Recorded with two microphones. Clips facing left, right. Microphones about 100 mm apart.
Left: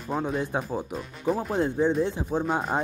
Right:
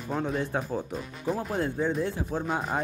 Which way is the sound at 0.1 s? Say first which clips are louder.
Left 2 dB; 10° left (ahead or behind).